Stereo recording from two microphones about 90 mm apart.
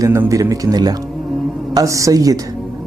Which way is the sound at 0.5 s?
45° right (ahead or behind).